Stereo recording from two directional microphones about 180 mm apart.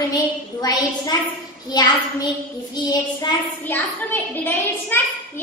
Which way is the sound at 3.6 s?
10° left (ahead or behind).